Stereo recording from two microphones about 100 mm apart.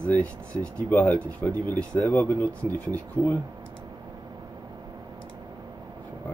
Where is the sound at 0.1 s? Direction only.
15° left (ahead or behind).